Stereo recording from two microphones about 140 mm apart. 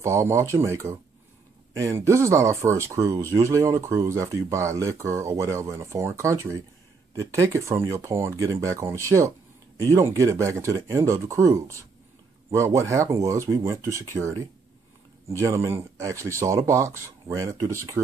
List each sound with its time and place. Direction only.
0.0 s speech: 20° right (ahead or behind)